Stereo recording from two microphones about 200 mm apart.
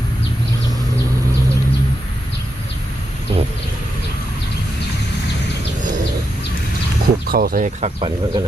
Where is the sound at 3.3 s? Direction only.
30° right (ahead or behind).